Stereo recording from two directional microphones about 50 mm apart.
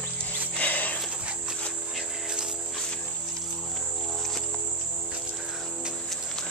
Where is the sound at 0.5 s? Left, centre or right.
Left.